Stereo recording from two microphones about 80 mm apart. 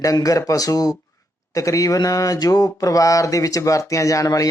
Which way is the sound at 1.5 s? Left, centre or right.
Left.